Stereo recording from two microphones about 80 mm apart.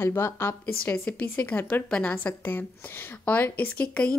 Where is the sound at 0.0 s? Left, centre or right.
Left.